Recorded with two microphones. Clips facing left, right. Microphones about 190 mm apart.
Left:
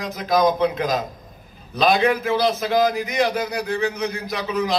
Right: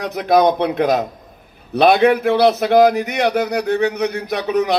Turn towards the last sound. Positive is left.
turn(degrees=-65)  # may be behind; listen again after turning